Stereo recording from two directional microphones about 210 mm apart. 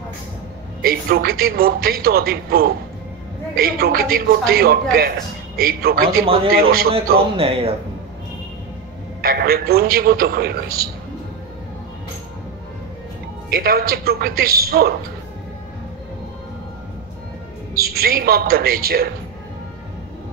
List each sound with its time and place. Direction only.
0.8 s a man's voice: 45° right (ahead or behind)
7.3 s a man's voice: 25° right (ahead or behind)
9.2 s a man's voice: 45° right (ahead or behind)
13.5 s a man's voice: 45° right (ahead or behind)
17.7 s a man's voice: 45° right (ahead or behind)